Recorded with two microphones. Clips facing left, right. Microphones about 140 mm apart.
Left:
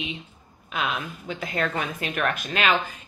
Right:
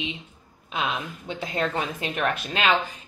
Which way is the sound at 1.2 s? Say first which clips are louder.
Right 1 dB; 25° right (ahead or behind).